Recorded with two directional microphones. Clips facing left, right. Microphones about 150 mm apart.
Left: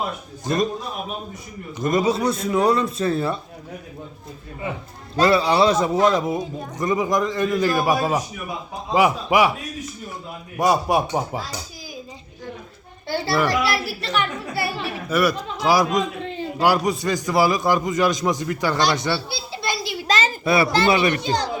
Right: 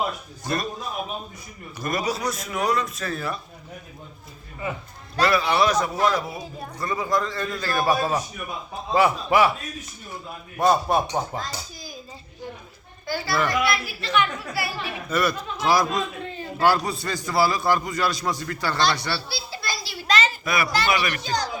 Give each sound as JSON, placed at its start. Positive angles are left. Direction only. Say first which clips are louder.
{"t": 0.4, "sound": "a man's voice", "louder": "left 6 dB", "side_deg": 20}
{"t": 1.8, "sound": "a man's voice", "louder": "left 6 dB", "side_deg": 20}
{"t": 5.1, "sound": "a man's voice", "louder": "left 4 dB", "side_deg": 25}
{"t": 10.6, "sound": "a man's voice", "louder": "left 1 dB", "side_deg": 10}
{"t": 13.1, "sound": "a woman's voice", "louder": "left 4 dB", "side_deg": 30}
{"t": 15.1, "sound": "a man's voice", "louder": "left 4 dB", "side_deg": 10}